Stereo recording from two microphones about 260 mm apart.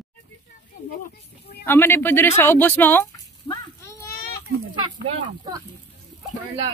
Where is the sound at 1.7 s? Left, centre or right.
Centre.